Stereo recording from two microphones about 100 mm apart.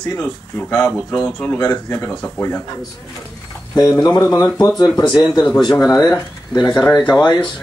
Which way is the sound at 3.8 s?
40° left (ahead or behind).